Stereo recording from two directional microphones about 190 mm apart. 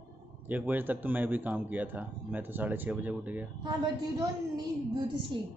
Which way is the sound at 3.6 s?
20° right (ahead or behind).